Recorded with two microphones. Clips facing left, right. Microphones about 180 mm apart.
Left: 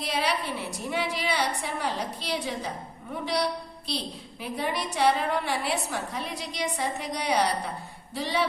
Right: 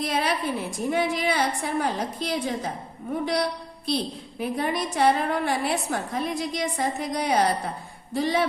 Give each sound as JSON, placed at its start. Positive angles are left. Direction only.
{"t": 0.0, "sound": "a woman's voice", "side_deg": -50}